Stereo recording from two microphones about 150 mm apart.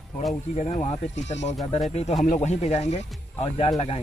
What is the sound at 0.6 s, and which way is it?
Speech, 50° left (ahead or behind).